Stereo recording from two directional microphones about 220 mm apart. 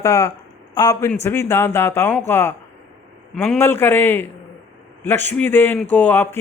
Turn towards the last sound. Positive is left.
turn(degrees=10)  # may be behind; listen again after turning